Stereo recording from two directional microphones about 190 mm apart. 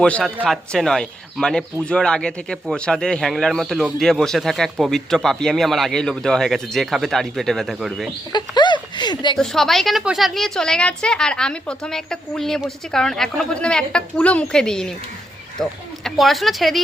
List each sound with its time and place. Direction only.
0.0 s speech: centre (ahead or behind)
8.3 s speech: 20° left (ahead or behind)
9.4 s speech: centre (ahead or behind)